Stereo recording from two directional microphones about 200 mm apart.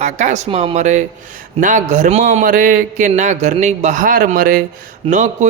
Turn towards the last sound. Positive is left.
turn(degrees=-40)  # may be behind; listen again after turning